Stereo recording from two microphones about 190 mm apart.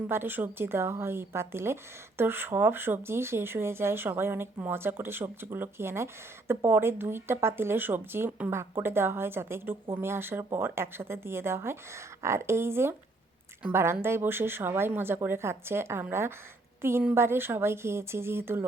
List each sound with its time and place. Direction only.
0.1 s speech: 10° right (ahead or behind)